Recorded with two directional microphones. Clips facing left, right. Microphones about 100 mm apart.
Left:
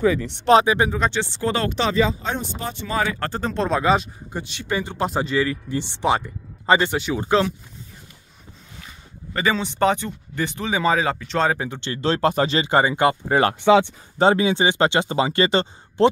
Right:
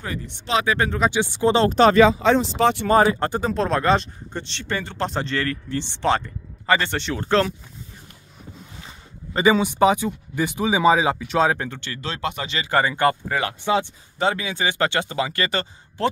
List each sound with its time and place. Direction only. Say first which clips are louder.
0.7 s speech: left 2 dB; 15° left (ahead or behind)
0.9 s speech: right 1 dB; 5° right (ahead or behind)
1.2 s speech: right 5 dB; 15° right (ahead or behind)
1.7 s speech: right 8 dB; 45° right (ahead or behind)
2.0 s speech: right 7 dB; 85° right
2.9 s speech: right 5 dB; 40° right (ahead or behind)
3.2 s speech: right 3 dB; 15° right (ahead or behind)
3.4 s speech: left 1 dB; centre (ahead or behind); by 6.9 s 20° left (ahead or behind)
6.9 s speech: left 2 dB; 10° left (ahead or behind)
9.3 s speech: right 4 dB; 15° right (ahead or behind)
11.5 s speech: left 1 dB; 10° left (ahead or behind)
11.8 s speech: left 8 dB; 30° left (ahead or behind)
13.7 s speech: left 6 dB; 90° left
14.1 s speech: left 6 dB; 30° left (ahead or behind)